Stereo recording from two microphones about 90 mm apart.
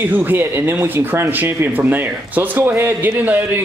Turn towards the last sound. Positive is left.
turn(degrees=-20)  # may be behind; listen again after turning